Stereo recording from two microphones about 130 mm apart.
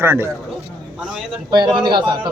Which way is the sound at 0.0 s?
20° right (ahead or behind).